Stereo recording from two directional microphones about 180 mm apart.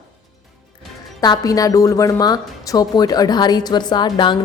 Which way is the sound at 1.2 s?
20° left (ahead or behind).